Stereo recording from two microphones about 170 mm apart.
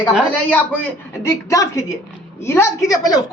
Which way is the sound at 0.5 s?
10° left (ahead or behind).